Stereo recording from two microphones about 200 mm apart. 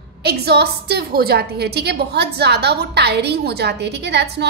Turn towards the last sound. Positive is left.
turn(degrees=-55)  # may be behind; listen again after turning